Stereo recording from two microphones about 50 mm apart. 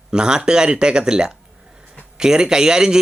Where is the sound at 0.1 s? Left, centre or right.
Centre.